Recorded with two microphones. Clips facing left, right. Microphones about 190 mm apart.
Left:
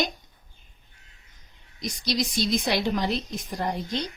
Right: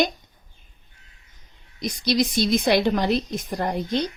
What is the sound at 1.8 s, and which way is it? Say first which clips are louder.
A woman's voice: right 6 dB; 60° right (ahead or behind).